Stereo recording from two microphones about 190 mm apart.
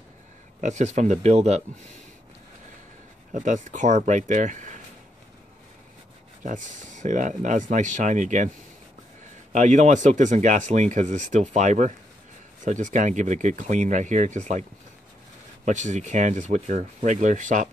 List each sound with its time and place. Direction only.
0.6 s speech: 40° right (ahead or behind)
3.3 s speech: 40° right (ahead or behind)
6.4 s speech: 40° right (ahead or behind)
9.5 s speech: 40° right (ahead or behind)